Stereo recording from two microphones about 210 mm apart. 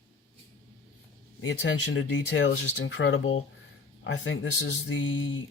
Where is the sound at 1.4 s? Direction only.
60° left (ahead or behind).